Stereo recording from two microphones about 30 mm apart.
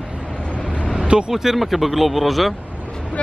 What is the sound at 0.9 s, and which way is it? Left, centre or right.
Vehicle, right.